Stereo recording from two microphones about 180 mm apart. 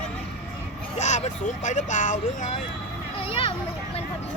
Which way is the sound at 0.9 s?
40° left (ahead or behind).